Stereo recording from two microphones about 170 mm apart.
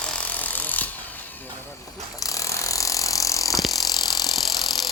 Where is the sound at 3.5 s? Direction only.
Centre (ahead or behind).